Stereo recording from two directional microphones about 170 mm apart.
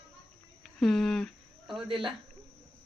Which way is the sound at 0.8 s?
Centre (ahead or behind).